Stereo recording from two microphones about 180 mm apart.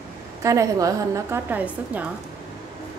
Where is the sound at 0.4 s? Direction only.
15° right (ahead or behind).